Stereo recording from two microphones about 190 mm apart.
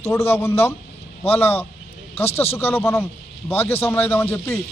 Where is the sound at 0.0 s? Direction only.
15° left (ahead or behind).